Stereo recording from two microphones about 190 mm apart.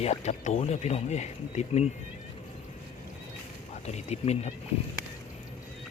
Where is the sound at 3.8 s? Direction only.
35° left (ahead or behind).